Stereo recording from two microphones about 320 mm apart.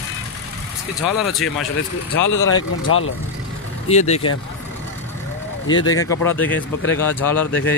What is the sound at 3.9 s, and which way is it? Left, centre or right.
Speech, left.